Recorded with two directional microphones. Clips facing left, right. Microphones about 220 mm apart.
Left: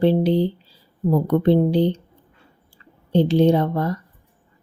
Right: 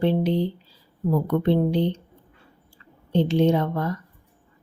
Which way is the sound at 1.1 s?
35° left (ahead or behind).